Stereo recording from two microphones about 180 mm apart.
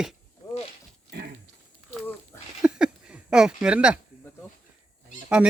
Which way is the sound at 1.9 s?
10° left (ahead or behind).